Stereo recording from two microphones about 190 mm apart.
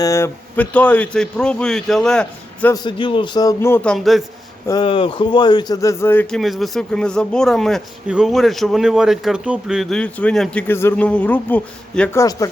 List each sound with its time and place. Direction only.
0.0 s speech: 15° left (ahead or behind)
2.7 s speech: 25° left (ahead or behind); by 4.2 s centre (ahead or behind)
4.6 s a man's voice: 20° left (ahead or behind)
6.4 s speech: centre (ahead or behind); by 12.5 s 15° left (ahead or behind)